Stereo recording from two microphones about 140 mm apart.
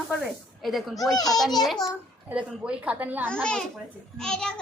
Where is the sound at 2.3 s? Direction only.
10° right (ahead or behind).